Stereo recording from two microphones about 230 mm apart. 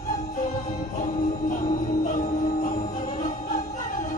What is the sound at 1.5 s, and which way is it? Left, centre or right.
Music, left.